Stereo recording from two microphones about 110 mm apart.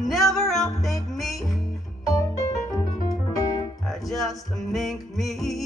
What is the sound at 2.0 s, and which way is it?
Music, 30° left (ahead or behind).